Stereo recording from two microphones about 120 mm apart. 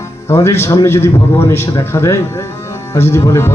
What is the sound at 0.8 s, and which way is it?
Speech, 20° left (ahead or behind).